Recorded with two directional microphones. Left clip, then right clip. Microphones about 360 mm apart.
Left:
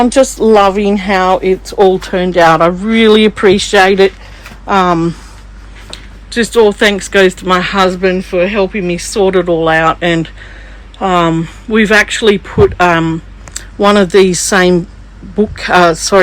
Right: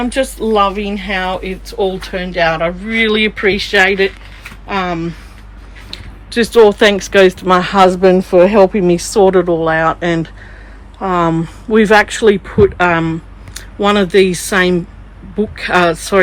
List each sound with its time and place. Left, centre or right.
0.1 s speech: centre
1.3 s speech: left
1.8 s speech: centre
2.5 s speech: left
2.8 s speech: centre
5.9 s speech: centre